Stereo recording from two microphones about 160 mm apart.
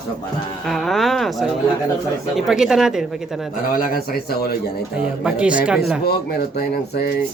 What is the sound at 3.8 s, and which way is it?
Speech, 70° left (ahead or behind).